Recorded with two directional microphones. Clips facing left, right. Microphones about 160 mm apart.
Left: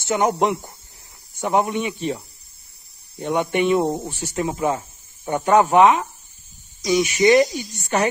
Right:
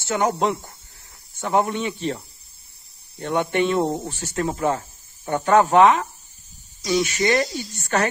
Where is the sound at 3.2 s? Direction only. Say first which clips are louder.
Left 1 dB; 20° left (ahead or behind).